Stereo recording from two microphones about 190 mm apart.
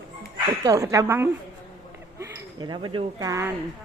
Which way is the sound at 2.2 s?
25° right (ahead or behind).